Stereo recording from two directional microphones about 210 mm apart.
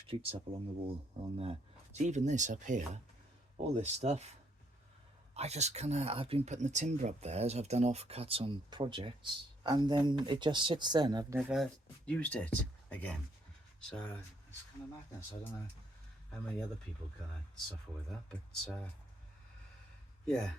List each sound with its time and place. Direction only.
0.1 s speech: 25° right (ahead or behind)
11.3 s speech: centre (ahead or behind)
18.3 s speech: 5° left (ahead or behind)